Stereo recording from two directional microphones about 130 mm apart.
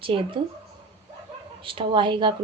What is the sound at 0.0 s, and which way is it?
Speech, 40° right (ahead or behind).